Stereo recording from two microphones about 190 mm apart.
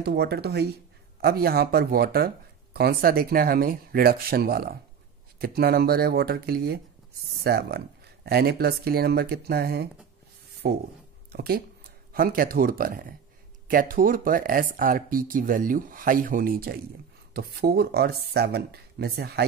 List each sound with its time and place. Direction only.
0.0 s speech: 60° right (ahead or behind)